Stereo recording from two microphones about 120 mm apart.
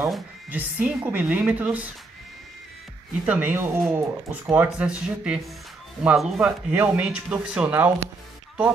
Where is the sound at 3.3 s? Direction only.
15° right (ahead or behind).